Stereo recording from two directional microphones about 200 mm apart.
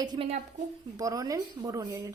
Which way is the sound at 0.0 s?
25° right (ahead or behind).